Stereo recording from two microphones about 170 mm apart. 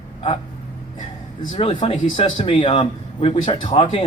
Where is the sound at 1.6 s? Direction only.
35° left (ahead or behind).